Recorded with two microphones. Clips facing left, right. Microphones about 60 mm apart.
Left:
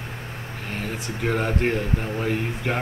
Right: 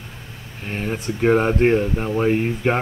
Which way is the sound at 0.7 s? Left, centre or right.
Right.